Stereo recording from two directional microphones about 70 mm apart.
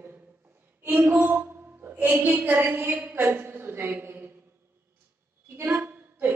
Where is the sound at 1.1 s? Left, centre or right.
Right.